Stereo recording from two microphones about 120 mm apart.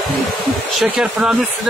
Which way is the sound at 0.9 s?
5° right (ahead or behind).